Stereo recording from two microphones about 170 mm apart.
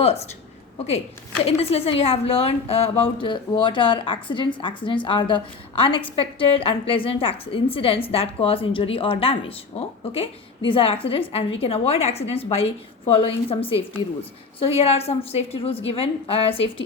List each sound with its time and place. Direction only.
0.0 s a woman's voice: 35° left (ahead or behind)
1.5 s a woman's voice: 35° left (ahead or behind)